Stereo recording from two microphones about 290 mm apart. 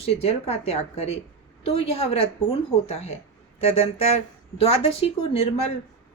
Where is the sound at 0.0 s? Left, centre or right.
Left.